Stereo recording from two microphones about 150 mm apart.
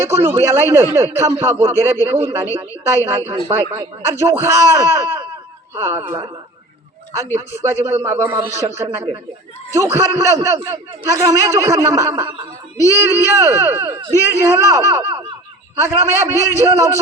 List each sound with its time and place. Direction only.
0.0 s speech: 15° right (ahead or behind)
7.3 s a man's voice: 15° right (ahead or behind)
12.7 s child singing: 20° left (ahead or behind)
13.1 s a man's voice: 20° right (ahead or behind)
15.1 s laughter: 35° right (ahead or behind)
15.7 s speech: 20° right (ahead or behind)